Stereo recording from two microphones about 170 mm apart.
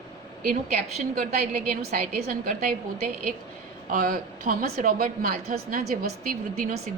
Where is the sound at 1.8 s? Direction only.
50° right (ahead or behind).